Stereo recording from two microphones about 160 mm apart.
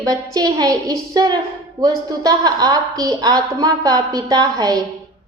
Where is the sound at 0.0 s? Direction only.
25° right (ahead or behind).